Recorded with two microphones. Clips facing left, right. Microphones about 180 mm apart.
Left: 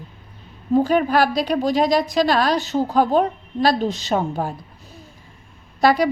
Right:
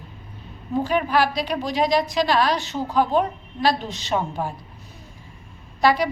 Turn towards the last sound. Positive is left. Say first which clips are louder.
# left 3 dB
turn(degrees=40)  # may be behind; listen again after turning